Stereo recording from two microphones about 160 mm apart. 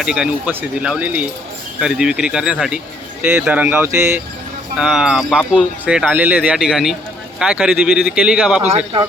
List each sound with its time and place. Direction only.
0.0 s speech: 5° right (ahead or behind)
4.8 s speech: 5° right (ahead or behind)
8.7 s speech: 35° right (ahead or behind)